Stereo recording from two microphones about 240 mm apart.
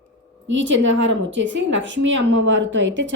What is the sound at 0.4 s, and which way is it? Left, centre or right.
A woman's voice, right.